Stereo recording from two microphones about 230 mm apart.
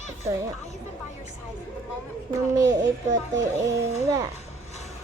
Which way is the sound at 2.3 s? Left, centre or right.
Centre.